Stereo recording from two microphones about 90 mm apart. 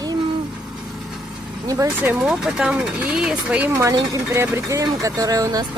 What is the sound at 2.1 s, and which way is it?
Speech, 10° right (ahead or behind).